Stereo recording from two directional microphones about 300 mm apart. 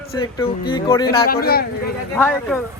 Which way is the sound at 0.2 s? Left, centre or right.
Centre.